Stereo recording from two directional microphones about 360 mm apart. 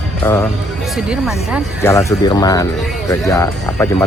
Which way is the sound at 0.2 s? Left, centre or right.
Centre.